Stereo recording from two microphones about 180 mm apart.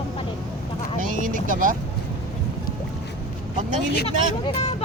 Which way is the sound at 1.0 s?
45° right (ahead or behind).